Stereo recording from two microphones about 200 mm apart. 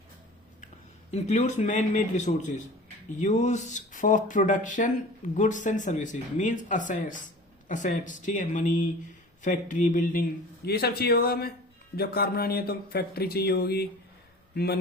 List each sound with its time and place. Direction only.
1.1 s a man's voice: 35° left (ahead or behind); by 14.8 s 50° left (ahead or behind)